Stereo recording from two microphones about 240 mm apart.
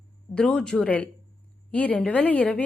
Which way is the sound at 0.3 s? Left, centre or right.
Centre.